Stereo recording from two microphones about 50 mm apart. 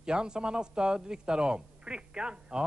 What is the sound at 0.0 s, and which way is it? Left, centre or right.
A man's voice, centre.